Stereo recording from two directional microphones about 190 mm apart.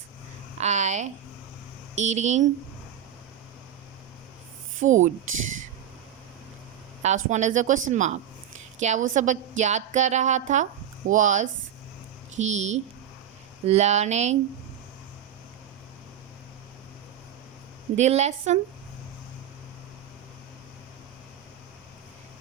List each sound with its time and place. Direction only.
0.6 s a sound: 35° right (ahead or behind)
2.0 s a woman's voice: 35° right (ahead or behind)
4.8 s a woman's voice: 40° right (ahead or behind)
7.0 s a woman's voice: 40° right (ahead or behind)
17.9 s a woman's voice: 35° right (ahead or behind)